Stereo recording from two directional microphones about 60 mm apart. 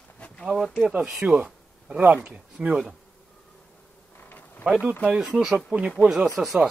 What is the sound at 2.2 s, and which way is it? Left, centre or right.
Speech, centre.